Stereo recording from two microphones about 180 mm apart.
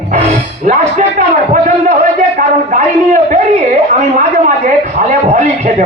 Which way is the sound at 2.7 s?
50° right (ahead or behind).